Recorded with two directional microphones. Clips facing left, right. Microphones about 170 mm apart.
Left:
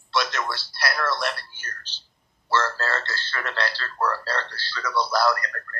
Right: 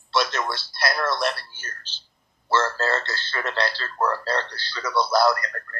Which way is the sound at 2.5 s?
25° right (ahead or behind).